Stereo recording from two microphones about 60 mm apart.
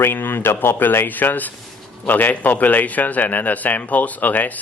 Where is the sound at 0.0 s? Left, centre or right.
Left.